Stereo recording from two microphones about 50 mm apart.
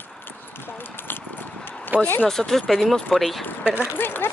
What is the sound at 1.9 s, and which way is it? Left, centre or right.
Speech, right.